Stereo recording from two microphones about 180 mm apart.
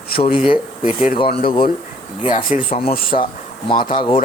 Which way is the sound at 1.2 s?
30° left (ahead or behind).